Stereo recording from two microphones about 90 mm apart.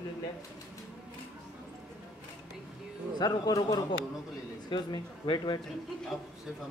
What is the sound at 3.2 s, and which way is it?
Speech, 50° left (ahead or behind).